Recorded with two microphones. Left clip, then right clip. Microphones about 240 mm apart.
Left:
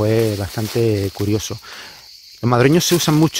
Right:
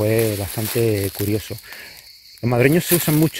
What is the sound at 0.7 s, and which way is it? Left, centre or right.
Speech, left.